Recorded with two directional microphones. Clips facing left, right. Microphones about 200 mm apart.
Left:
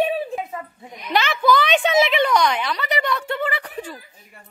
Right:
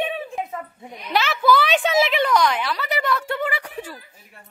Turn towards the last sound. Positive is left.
turn(degrees=-10)  # may be behind; listen again after turning